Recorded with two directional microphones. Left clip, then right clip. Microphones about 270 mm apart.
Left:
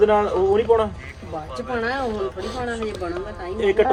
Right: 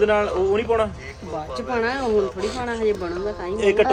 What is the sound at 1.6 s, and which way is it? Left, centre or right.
Speech, right.